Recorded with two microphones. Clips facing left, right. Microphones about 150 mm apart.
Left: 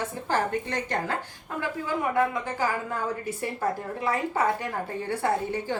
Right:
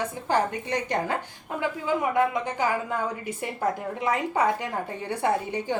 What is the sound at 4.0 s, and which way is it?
A woman's voice, 15° right (ahead or behind).